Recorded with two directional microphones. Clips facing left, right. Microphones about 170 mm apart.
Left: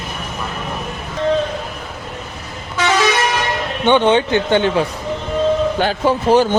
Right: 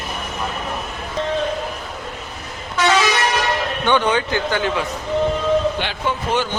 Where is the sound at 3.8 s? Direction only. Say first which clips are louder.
Left 6 dB; 25° left (ahead or behind).